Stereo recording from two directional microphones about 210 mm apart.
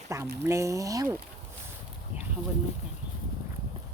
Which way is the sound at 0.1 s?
15° right (ahead or behind).